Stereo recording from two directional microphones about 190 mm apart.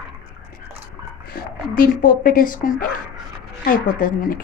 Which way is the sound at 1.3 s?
50° left (ahead or behind).